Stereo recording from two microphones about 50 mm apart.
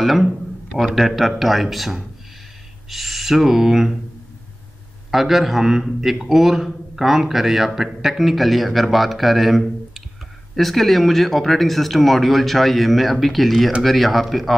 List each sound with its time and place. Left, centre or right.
0.0 s a man's voice: centre
5.1 s a man's voice: centre